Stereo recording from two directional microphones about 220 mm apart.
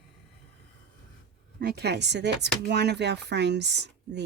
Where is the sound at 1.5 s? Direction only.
45° right (ahead or behind).